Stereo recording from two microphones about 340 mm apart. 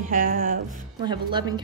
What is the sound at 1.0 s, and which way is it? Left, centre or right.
Speech, centre.